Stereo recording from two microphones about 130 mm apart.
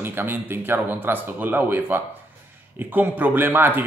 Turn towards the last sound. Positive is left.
turn(degrees=-15)  # may be behind; listen again after turning